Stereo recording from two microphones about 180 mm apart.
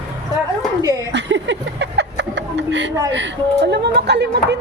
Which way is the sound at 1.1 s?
75° right (ahead or behind).